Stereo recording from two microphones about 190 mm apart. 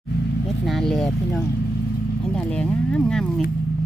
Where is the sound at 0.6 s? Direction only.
Centre (ahead or behind).